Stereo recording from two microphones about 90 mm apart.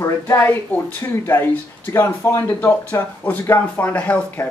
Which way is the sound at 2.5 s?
25° left (ahead or behind).